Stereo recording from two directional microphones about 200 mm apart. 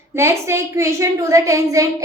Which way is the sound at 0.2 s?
15° right (ahead or behind).